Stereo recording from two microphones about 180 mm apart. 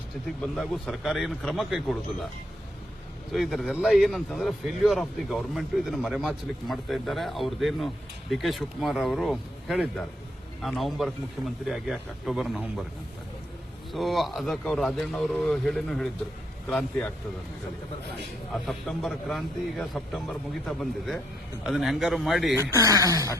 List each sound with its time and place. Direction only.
0.4 s a man's voice: 5° left (ahead or behind)
3.3 s a man's voice: centre (ahead or behind)
13.9 s a man's voice: centre (ahead or behind)
18.5 s a man's voice: centre (ahead or behind)
22.5 s speech: 20° right (ahead or behind)